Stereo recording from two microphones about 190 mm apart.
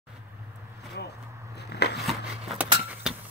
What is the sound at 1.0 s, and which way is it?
Vehicle, 60° left (ahead or behind).